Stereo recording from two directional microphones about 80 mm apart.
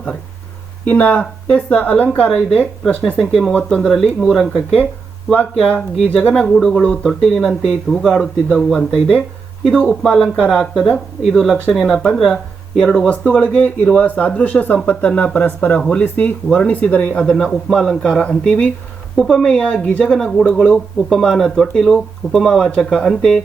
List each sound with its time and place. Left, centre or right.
0.9 s speech: centre
10.6 s speech: centre
17.2 s speech: centre